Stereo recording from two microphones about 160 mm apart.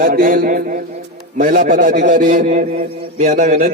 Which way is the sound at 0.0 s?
60° right (ahead or behind).